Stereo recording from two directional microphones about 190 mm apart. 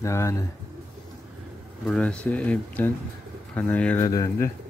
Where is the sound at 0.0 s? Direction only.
15° left (ahead or behind).